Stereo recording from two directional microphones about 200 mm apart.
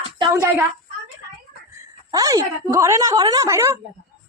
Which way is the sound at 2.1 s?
20° right (ahead or behind).